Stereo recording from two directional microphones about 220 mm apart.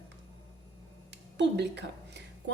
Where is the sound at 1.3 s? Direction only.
50° right (ahead or behind).